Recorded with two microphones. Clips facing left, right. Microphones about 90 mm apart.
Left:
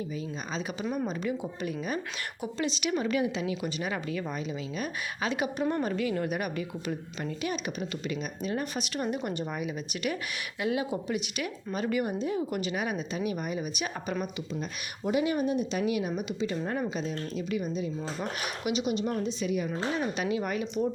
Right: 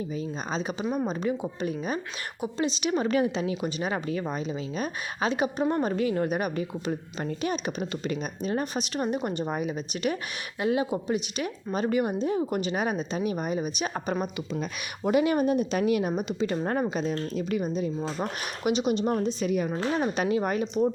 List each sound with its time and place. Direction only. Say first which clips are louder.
0.2 s a woman's voice: right 4 dB; 30° right (ahead or behind)
15.0 s speech: right 4 dB; 60° right (ahead or behind); by 20.7 s 40° right (ahead or behind)